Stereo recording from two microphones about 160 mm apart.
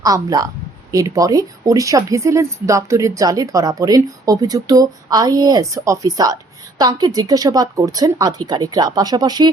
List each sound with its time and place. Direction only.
0.0 s speech: 25° right (ahead or behind)